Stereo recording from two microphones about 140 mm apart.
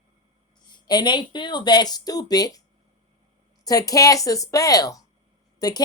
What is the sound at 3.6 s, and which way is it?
A woman's voice, 25° left (ahead or behind).